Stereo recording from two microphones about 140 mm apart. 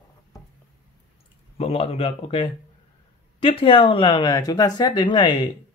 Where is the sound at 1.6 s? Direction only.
45° left (ahead or behind).